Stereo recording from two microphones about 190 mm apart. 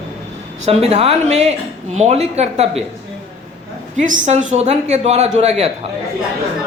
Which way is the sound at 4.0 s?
40° right (ahead or behind).